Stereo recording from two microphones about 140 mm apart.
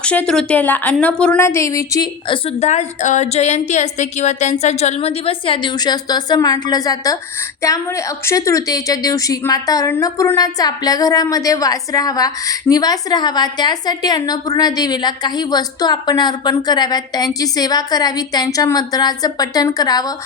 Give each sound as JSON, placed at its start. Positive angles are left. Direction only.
{"t": 0.0, "sound": "a woman's voice", "side_deg": 10}
{"t": 2.2, "sound": "a woman's voice", "side_deg": 40}
{"t": 2.6, "sound": "a woman's voice", "side_deg": 60}